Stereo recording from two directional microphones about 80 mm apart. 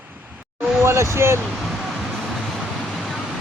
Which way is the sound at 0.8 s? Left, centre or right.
Right.